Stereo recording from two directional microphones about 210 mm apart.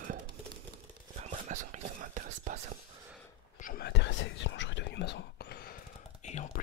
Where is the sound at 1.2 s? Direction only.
35° right (ahead or behind).